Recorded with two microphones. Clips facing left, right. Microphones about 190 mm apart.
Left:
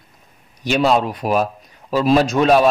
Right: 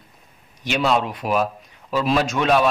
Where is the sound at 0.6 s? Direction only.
40° left (ahead or behind).